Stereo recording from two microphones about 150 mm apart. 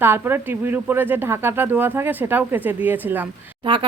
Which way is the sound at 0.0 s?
15° right (ahead or behind).